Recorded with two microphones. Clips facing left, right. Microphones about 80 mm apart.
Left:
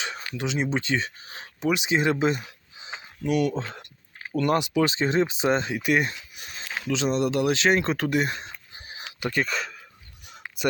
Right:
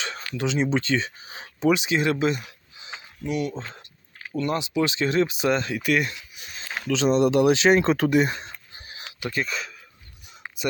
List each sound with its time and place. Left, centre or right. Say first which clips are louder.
0.0 s a sound: even; centre
0.3 s speech: right 3 dB; centre
1.0 s speech: even; centre
1.9 s speech: even; left
3.2 s speech: left 4 dB; left
4.9 s speech: right 1 dB; left
6.7 s a sound: right 3 dB; centre
7.1 s speech: right 6 dB; centre
9.3 s speech: left 2 dB; left